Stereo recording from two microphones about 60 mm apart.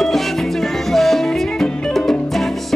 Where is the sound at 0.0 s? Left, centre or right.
Centre.